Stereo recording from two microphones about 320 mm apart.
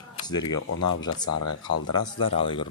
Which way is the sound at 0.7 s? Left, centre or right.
Left.